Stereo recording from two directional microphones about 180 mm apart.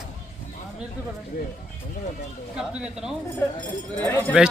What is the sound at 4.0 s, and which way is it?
Speech, 10° left (ahead or behind).